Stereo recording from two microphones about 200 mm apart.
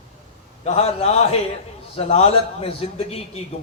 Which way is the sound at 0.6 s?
30° left (ahead or behind).